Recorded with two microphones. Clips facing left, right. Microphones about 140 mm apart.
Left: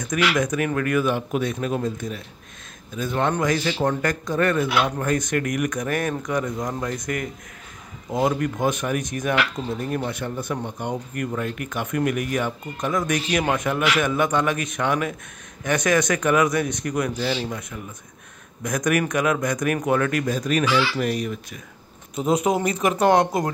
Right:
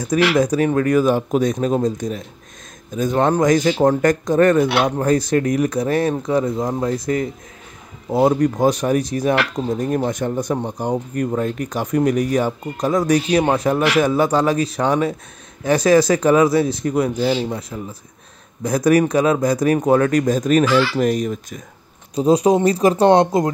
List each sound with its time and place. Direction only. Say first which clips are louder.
0.3 s speech: right 6 dB; 35° right (ahead or behind)
22.1 s speech: right 6 dB; 35° right (ahead or behind)